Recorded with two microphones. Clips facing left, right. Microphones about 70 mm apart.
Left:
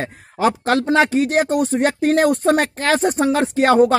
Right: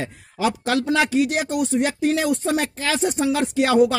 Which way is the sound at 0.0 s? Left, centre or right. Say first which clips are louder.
Left 4 dB; left.